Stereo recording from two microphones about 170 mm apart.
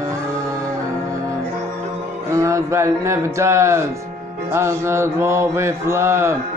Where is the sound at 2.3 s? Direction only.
15° right (ahead or behind).